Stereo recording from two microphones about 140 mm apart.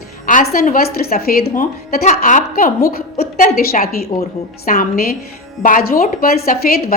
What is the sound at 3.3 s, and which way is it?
A woman's voice, 90° left.